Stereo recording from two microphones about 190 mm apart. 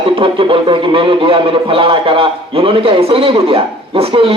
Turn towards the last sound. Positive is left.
turn(degrees=-30)  # may be behind; listen again after turning